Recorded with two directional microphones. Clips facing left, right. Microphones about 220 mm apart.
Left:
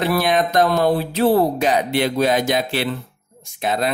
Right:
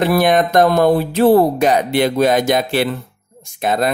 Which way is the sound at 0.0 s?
50° right (ahead or behind).